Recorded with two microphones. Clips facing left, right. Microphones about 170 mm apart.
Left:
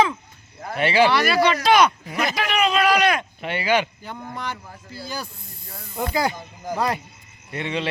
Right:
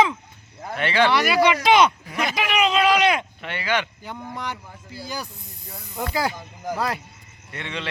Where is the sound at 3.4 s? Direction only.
15° left (ahead or behind).